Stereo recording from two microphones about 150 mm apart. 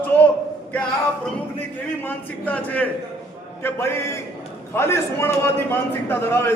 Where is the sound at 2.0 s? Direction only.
10° left (ahead or behind).